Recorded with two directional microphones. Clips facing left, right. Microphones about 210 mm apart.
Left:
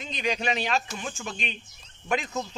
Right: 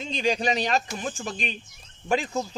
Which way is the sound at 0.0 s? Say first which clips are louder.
Right 4 dB; 30° right (ahead or behind).